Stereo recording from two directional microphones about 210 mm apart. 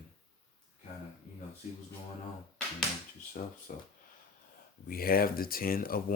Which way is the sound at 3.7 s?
40° left (ahead or behind).